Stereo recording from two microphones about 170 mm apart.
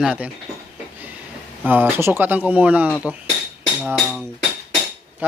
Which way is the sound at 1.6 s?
10° right (ahead or behind).